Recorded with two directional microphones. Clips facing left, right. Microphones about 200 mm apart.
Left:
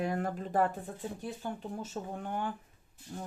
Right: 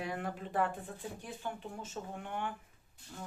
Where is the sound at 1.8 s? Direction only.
40° left (ahead or behind).